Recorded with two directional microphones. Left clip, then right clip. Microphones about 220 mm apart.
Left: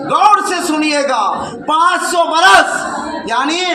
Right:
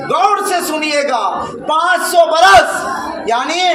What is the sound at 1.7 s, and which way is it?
A man's voice, 20° right (ahead or behind).